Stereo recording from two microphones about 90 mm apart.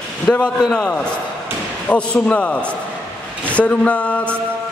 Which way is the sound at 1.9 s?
15° left (ahead or behind).